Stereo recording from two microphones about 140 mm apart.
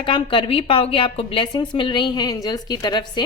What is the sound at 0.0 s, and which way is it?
A woman's voice, 40° left (ahead or behind).